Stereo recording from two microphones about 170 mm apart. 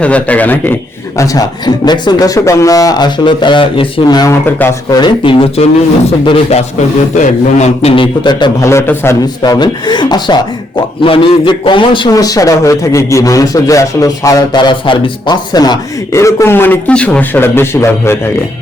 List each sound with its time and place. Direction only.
0.0 s a man's voice: 10° left (ahead or behind)